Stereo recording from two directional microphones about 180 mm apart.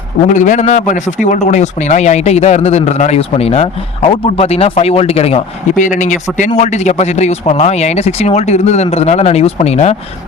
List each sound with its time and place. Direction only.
0.3 s speech: 45° left (ahead or behind)
5.7 s speech: 45° left (ahead or behind)